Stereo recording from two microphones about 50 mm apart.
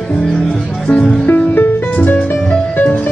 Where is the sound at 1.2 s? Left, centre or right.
Left.